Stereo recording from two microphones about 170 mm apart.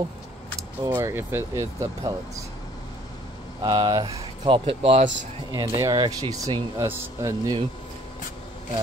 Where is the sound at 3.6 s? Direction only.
25° right (ahead or behind).